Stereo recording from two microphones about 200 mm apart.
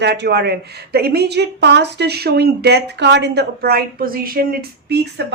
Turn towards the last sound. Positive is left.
turn(degrees=-55)  # may be behind; listen again after turning